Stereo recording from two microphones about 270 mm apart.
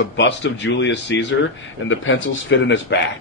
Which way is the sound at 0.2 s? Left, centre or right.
Left.